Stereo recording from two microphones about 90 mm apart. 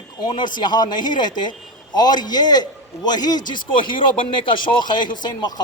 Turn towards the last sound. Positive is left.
turn(degrees=50)  # may be behind; listen again after turning